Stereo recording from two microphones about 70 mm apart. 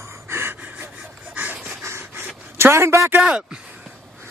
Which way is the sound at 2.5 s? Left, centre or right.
Right.